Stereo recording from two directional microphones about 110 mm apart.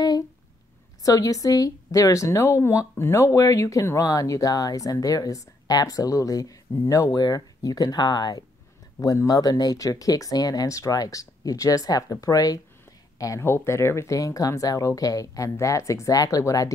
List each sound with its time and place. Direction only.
1.0 s a woman's voice: 30° left (ahead or behind)